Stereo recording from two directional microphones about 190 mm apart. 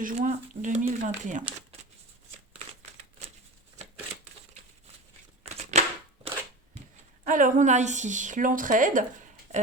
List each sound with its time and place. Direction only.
0.0 s speech: 40° right (ahead or behind)
5.7 s a sound: 35° right (ahead or behind)
7.3 s a woman's voice: 45° right (ahead or behind)